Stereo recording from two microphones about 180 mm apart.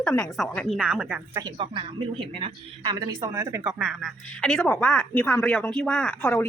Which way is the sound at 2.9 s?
20° right (ahead or behind).